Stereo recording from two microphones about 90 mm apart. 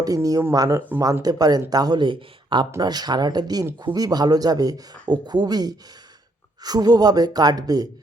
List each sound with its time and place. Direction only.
0.0 s speech: 40° right (ahead or behind); by 2.6 s 60° right (ahead or behind)
2.8 s speech: 50° right (ahead or behind)